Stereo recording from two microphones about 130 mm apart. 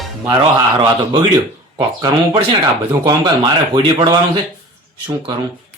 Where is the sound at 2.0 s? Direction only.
40° right (ahead or behind).